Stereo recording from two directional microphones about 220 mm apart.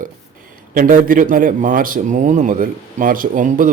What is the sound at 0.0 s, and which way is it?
A man's voice, 40° right (ahead or behind).